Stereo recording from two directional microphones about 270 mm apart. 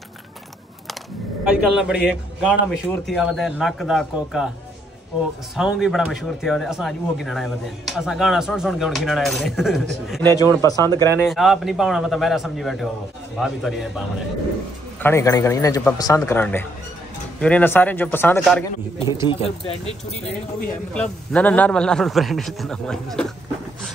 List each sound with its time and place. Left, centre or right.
1.4 s speech: centre
5.6 s speech: centre
11.1 s speech: centre
15.0 s a man's voice: centre
19.2 s speech: centre
20.9 s speech: centre